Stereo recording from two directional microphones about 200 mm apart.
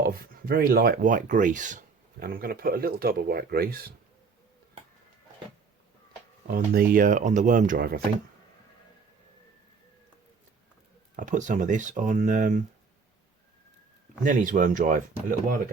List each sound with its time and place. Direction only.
0.0 s speech: 50° right (ahead or behind)
6.5 s speech: 45° right (ahead or behind)
11.2 s speech: 40° right (ahead or behind)
14.3 s speech: 40° right (ahead or behind)